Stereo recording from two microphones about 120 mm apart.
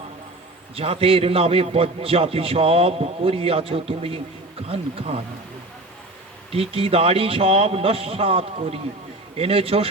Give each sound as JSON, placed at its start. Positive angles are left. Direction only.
{"t": 0.8, "sound": "a man's voice", "side_deg": -55}
{"t": 6.5, "sound": "a man's voice", "side_deg": -50}